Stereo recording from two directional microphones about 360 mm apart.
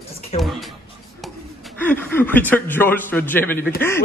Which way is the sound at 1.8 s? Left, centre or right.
Centre.